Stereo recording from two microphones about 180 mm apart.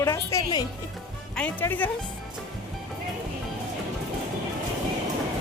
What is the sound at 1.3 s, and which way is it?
Speech, 10° left (ahead or behind).